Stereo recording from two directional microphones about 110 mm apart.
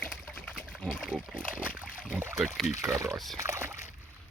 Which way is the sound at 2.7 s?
30° right (ahead or behind).